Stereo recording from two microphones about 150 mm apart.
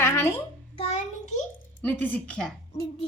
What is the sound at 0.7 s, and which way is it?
Child singing, 45° left (ahead or behind).